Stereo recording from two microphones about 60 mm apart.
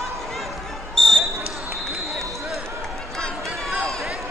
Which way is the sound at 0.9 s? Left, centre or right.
Centre.